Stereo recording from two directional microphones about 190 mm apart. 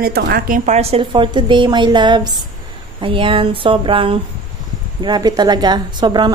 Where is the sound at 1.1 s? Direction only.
25° right (ahead or behind).